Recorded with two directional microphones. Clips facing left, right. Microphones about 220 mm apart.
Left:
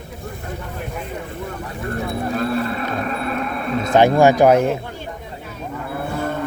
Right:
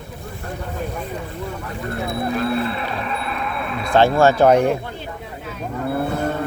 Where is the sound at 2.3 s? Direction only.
40° left (ahead or behind).